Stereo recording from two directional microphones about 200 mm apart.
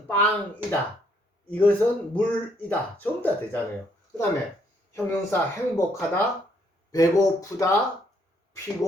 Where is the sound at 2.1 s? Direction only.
10° left (ahead or behind).